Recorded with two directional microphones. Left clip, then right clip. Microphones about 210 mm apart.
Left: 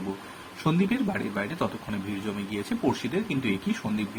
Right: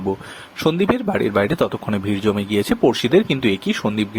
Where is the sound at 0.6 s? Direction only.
45° right (ahead or behind).